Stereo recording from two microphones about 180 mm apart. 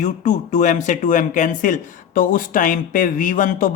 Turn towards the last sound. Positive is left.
turn(degrees=50)  # may be behind; listen again after turning